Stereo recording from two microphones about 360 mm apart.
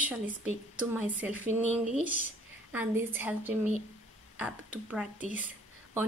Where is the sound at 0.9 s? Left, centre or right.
Centre.